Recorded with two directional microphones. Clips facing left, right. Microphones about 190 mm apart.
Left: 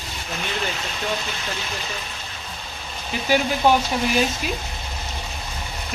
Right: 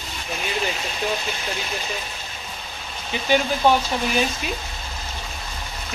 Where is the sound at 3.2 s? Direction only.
5° left (ahead or behind).